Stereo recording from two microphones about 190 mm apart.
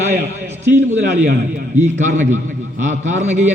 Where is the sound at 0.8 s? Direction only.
35° right (ahead or behind).